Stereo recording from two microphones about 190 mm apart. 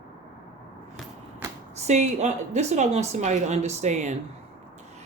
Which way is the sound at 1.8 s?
35° right (ahead or behind).